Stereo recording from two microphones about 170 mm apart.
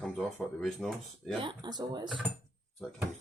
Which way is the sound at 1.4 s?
25° right (ahead or behind).